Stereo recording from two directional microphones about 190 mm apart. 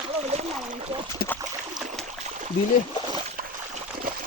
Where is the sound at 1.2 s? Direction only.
50° left (ahead or behind).